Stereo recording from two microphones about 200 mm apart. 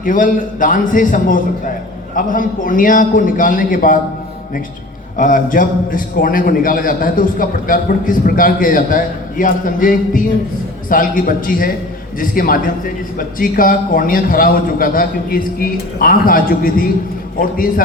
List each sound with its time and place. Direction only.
0.0 s a man's voice: 40° left (ahead or behind)
5.1 s a man's voice: 40° left (ahead or behind)